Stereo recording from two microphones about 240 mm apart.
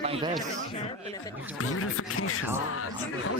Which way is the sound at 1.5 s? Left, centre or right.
Left.